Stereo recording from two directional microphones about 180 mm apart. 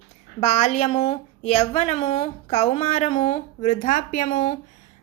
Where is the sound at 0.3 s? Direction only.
35° left (ahead or behind).